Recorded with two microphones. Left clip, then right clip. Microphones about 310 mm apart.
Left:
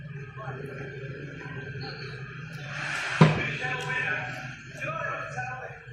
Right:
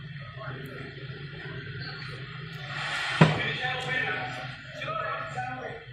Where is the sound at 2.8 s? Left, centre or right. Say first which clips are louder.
Even; right.